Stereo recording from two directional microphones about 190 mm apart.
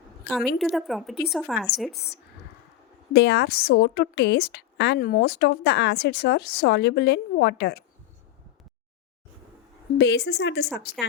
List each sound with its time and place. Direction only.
0.3 s speech: centre (ahead or behind)
3.1 s a woman's voice: 60° left (ahead or behind)
10.0 s a woman's voice: 65° left (ahead or behind)